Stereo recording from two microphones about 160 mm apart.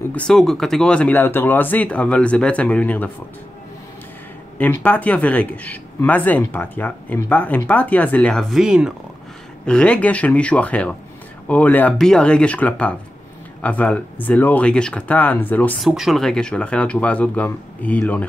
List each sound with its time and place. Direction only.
0.1 s speech: 5° left (ahead or behind)
4.6 s speech: 10° left (ahead or behind)
9.7 s speech: 5° left (ahead or behind)
15.8 s speech: centre (ahead or behind)